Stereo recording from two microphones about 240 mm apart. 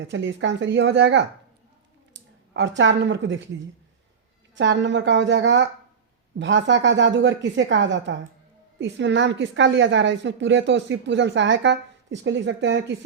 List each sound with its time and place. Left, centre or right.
0.0 s a woman's voice: right
2.5 s a woman's voice: right
4.5 s a woman's voice: right